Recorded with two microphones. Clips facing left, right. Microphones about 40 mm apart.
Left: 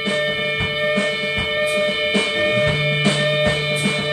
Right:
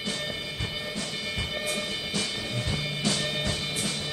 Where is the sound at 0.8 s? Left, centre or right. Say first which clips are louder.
Left 14 dB; left.